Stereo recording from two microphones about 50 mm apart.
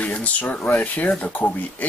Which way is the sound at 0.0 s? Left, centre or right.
Left.